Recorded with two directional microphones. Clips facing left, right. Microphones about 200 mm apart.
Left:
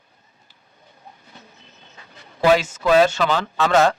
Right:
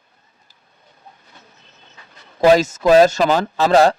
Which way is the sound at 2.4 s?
40° right (ahead or behind).